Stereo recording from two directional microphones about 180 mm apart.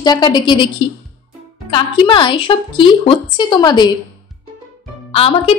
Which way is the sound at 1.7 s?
30° left (ahead or behind).